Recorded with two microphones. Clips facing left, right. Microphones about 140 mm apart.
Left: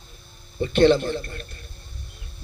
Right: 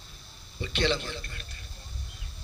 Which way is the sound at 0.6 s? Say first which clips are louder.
Left 12 dB; 50° left (ahead or behind).